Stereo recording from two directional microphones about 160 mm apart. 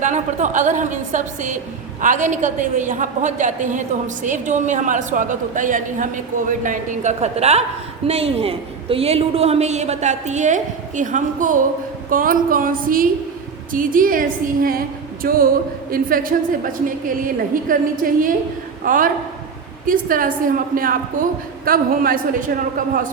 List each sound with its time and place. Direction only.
0.0 s a woman's voice: 50° right (ahead or behind)